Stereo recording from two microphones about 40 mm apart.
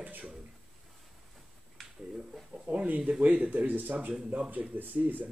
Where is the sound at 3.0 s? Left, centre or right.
Right.